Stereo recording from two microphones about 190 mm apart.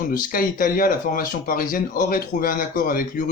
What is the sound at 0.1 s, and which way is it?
Speech, 45° left (ahead or behind).